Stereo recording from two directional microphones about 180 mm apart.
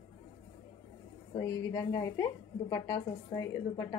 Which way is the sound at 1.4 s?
20° left (ahead or behind).